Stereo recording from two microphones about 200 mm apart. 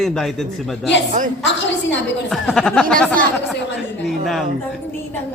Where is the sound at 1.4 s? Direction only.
65° left (ahead or behind).